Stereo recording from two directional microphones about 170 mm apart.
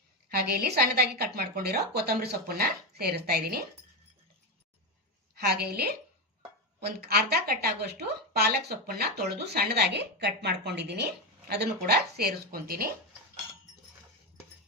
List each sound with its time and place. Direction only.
0.3 s a woman's voice: 65° right (ahead or behind)
5.3 s a woman's voice: 70° right (ahead or behind)
11.4 s a woman's voice: 70° right (ahead or behind)